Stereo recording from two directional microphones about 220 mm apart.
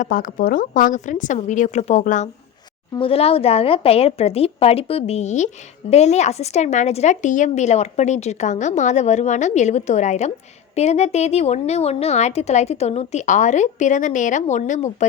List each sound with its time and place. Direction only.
0.0 s a woman's voice: 40° left (ahead or behind)